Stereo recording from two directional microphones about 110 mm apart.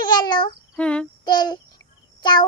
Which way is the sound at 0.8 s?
10° left (ahead or behind).